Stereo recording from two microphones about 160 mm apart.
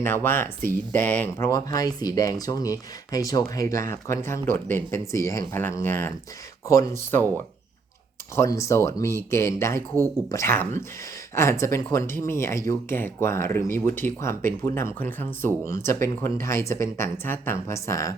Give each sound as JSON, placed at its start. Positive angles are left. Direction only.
{"t": 0.0, "sound": "speech", "side_deg": 15}
{"t": 8.4, "sound": "speech", "side_deg": 20}